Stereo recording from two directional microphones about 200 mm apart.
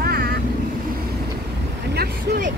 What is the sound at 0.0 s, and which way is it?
Vehicle, 50° right (ahead or behind).